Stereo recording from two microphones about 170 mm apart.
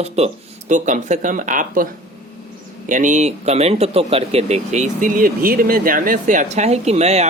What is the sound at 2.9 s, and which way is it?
Speech, 50° right (ahead or behind).